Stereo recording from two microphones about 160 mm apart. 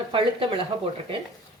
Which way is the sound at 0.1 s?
35° right (ahead or behind).